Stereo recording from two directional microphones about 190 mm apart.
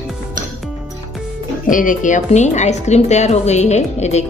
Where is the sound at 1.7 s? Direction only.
45° left (ahead or behind).